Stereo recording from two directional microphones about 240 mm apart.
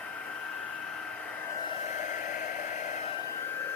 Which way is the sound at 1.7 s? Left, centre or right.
Left.